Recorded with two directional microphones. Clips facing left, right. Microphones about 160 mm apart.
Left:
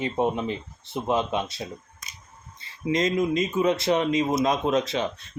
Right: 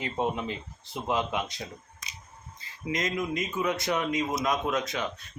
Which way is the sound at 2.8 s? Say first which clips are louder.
Left 7 dB; 25° left (ahead or behind).